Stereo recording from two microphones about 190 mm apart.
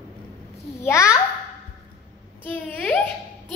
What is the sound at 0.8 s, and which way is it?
Babbling, 15° left (ahead or behind).